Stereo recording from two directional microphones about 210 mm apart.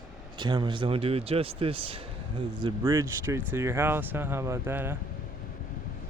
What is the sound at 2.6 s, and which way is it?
Speech, 15° right (ahead or behind).